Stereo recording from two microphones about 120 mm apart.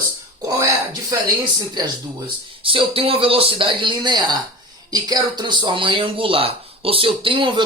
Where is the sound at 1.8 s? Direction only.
40° right (ahead or behind).